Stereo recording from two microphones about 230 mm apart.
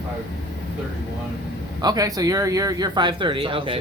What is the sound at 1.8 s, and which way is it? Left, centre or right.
Speech, centre.